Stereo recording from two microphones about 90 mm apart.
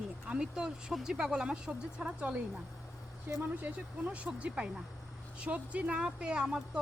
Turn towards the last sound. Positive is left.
turn(degrees=-10)  # may be behind; listen again after turning